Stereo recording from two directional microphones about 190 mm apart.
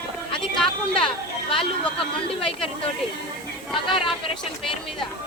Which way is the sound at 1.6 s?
30° left (ahead or behind).